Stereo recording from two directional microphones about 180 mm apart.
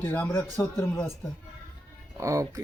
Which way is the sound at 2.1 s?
15° right (ahead or behind).